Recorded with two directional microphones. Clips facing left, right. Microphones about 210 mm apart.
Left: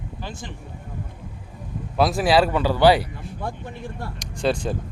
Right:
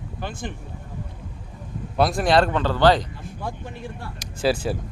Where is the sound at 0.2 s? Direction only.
55° right (ahead or behind).